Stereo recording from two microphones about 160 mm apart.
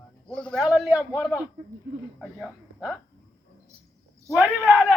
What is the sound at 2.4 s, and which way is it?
Speech, centre (ahead or behind).